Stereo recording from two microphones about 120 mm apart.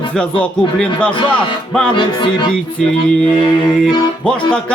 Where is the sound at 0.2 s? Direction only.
5° left (ahead or behind).